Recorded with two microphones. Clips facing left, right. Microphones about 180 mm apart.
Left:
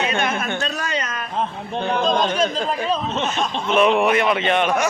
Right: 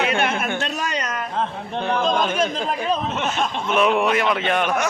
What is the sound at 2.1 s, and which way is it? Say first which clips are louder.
Speech: left 1 dB; 5° right (ahead or behind).